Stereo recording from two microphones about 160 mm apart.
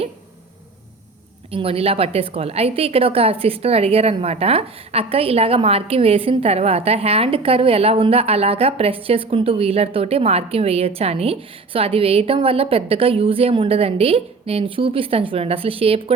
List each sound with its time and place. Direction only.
1.5 s a woman's voice: 35° right (ahead or behind)